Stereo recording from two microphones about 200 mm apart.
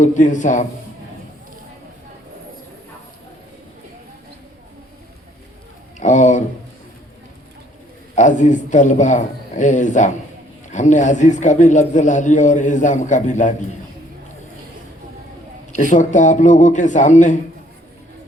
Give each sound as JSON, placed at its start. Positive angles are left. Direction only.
{"t": 0.0, "sound": "a man's voice", "side_deg": 40}
{"t": 6.0, "sound": "a sound", "side_deg": 35}
{"t": 8.1, "sound": "a man's voice", "side_deg": 35}
{"t": 15.7, "sound": "a man's voice", "side_deg": 40}